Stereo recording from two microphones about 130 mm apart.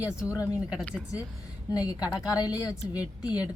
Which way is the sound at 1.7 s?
25° left (ahead or behind).